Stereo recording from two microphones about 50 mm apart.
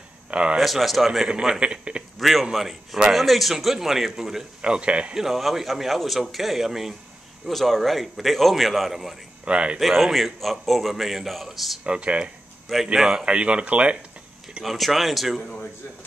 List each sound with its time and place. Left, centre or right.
0.3 s a sound: right
0.6 s a man's voice: centre
1.3 s a man's voice: centre
2.1 s a man's voice: centre
4.6 s a man's voice: right
5.1 s a man's voice: centre
9.4 s speech: right
9.8 s a man's voice: centre
11.8 s speech: right
12.6 s speech: centre
13.2 s a man's voice: right
14.6 s a man's voice: centre